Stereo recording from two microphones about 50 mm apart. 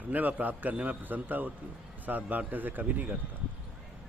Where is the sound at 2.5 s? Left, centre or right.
Right.